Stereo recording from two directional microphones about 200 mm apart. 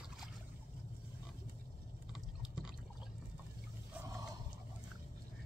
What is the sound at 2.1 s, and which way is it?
Chewing, 5° right (ahead or behind).